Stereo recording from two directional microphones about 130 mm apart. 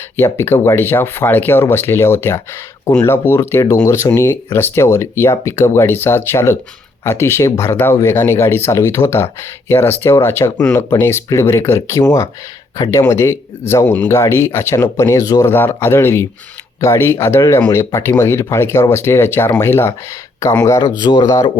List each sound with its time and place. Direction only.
0.2 s speech: 20° left (ahead or behind)